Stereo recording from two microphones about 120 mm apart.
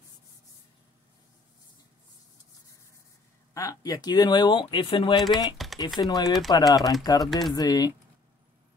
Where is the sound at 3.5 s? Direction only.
30° left (ahead or behind); by 5.2 s 50° left (ahead or behind).